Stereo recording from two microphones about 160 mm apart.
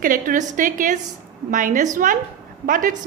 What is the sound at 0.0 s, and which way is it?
A woman's voice, 60° right (ahead or behind).